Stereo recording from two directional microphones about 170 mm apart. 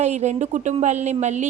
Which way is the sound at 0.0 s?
45° right (ahead or behind).